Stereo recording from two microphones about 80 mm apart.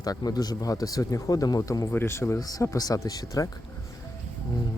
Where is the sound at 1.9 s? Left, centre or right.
Left.